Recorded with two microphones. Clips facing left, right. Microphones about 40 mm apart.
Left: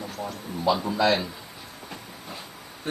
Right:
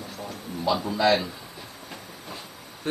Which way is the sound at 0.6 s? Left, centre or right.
Centre.